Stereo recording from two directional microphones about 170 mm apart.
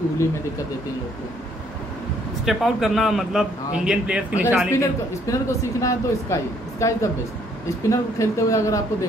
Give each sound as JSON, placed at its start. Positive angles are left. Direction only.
{"t": 2.4, "sound": "a man's voice", "side_deg": 0}
{"t": 4.7, "sound": "speech", "side_deg": 20}